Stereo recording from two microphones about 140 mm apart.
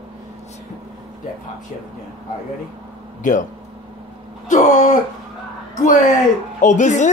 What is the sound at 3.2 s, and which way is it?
Speech, 65° left (ahead or behind).